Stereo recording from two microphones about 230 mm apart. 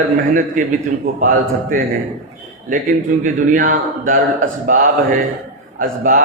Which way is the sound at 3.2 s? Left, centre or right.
Right.